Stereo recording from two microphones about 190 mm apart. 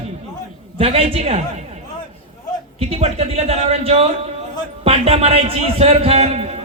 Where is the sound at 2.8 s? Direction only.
35° right (ahead or behind).